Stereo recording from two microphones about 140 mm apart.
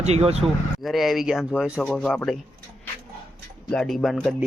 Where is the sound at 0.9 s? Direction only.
Centre (ahead or behind).